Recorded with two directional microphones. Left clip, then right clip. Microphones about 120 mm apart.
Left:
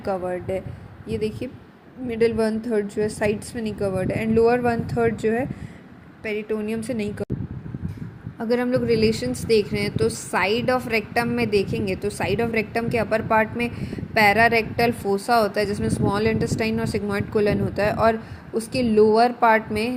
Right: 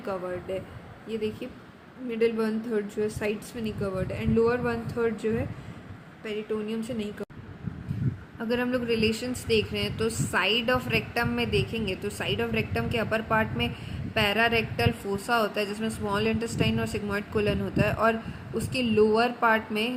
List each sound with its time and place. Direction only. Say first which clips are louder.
0.0 s a woman's voice: left 7 dB; 35° left (ahead or behind); by 7.3 s 50° left (ahead or behind)
8.4 s a woman's voice: left 6 dB; 30° left (ahead or behind)